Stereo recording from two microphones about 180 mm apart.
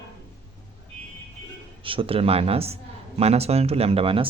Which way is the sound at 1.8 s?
30° right (ahead or behind).